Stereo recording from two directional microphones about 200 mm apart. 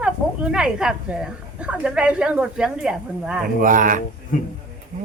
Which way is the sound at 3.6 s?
40° right (ahead or behind).